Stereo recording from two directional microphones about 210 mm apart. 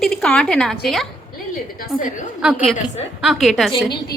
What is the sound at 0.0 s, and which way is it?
A woman's voice, 5° left (ahead or behind).